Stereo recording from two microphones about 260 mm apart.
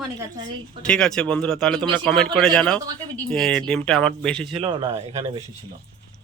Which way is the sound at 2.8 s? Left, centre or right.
Centre.